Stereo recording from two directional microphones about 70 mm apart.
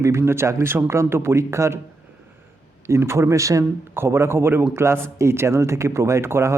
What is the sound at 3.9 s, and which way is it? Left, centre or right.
Speech, right.